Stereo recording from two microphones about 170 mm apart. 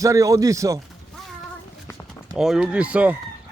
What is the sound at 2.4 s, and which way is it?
Speech, 5° right (ahead or behind).